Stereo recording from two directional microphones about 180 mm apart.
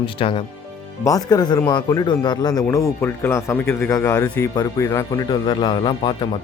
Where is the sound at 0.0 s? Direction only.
30° left (ahead or behind).